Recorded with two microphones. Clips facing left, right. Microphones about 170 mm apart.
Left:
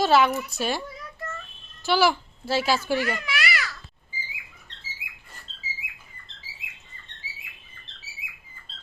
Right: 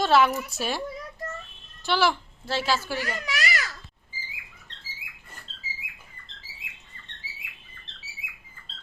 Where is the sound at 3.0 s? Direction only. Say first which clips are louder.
Left 3 dB; 40° right (ahead or behind).